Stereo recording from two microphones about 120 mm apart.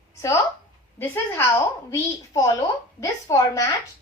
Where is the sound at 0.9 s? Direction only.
20° left (ahead or behind).